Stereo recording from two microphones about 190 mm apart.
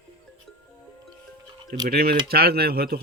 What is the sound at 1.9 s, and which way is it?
A man's voice, 55° right (ahead or behind).